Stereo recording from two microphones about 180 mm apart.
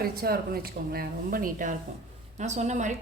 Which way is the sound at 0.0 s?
55° right (ahead or behind).